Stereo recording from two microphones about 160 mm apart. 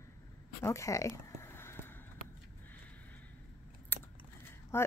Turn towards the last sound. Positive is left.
turn(degrees=15)  # may be behind; listen again after turning